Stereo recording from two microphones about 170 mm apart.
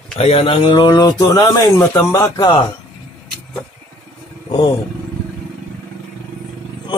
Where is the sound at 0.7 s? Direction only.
25° left (ahead or behind).